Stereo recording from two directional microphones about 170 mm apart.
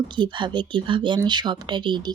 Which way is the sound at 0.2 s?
25° right (ahead or behind).